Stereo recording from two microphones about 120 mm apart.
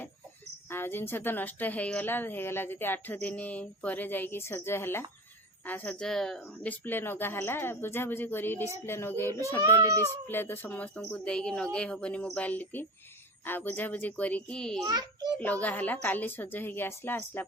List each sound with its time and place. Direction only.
0.7 s a woman's voice: 20° left (ahead or behind)
9.6 s speech: 25° right (ahead or behind)
10.0 s a woman's voice: 20° left (ahead or behind)
14.8 s a child's voice: 35° right (ahead or behind)
15.4 s a woman's voice: 10° left (ahead or behind)